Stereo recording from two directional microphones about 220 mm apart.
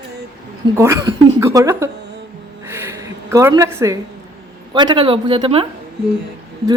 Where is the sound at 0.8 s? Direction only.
15° right (ahead or behind).